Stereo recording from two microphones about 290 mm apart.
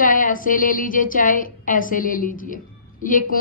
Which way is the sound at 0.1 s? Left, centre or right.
Left.